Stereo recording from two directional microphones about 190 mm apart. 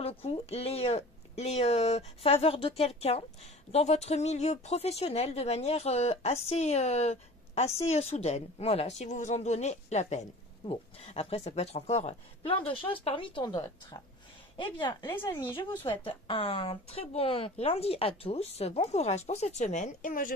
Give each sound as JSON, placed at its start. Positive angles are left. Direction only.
{"t": 0.0, "sound": "a woman's voice", "side_deg": 30}